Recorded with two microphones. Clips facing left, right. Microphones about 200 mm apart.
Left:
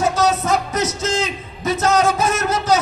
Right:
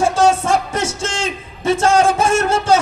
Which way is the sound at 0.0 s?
30° right (ahead or behind).